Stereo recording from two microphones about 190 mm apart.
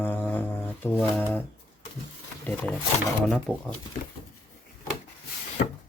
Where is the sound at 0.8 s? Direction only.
5° left (ahead or behind).